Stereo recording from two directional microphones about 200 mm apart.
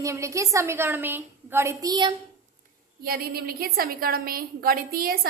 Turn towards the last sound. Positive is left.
turn(degrees=-45)  # may be behind; listen again after turning